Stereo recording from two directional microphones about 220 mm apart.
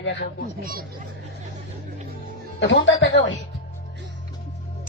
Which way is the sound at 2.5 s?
55° left (ahead or behind).